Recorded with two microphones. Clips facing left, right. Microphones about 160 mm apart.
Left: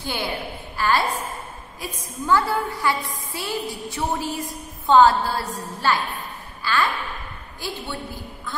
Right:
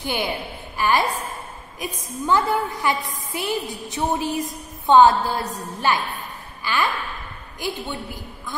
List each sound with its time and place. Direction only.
0.0 s a woman's voice: 20° right (ahead or behind)